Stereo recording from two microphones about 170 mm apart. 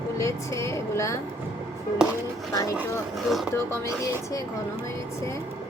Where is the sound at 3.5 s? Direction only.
15° left (ahead or behind).